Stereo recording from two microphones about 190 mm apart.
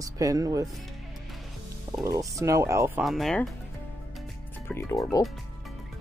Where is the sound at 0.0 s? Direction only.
15° right (ahead or behind).